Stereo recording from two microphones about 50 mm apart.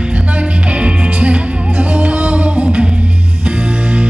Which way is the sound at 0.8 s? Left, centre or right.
Right.